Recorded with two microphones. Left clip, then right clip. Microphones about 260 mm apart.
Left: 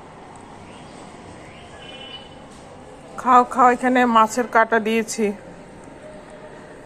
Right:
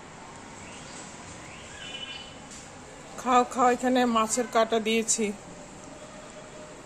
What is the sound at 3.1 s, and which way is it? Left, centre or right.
A woman's voice, centre.